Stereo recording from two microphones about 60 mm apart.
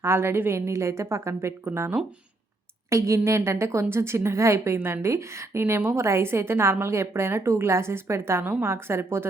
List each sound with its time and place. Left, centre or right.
0.0 s a woman's voice: right
2.9 s a woman's voice: right